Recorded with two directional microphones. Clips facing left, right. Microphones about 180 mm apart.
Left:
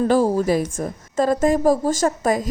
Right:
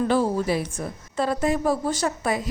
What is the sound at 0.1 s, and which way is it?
A woman's voice, 40° left (ahead or behind).